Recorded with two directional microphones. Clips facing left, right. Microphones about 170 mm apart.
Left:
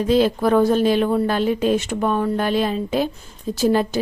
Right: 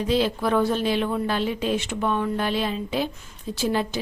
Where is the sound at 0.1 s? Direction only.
45° left (ahead or behind).